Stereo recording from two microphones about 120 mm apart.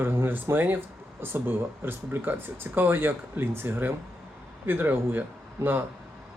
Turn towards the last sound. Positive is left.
turn(degrees=-20)  # may be behind; listen again after turning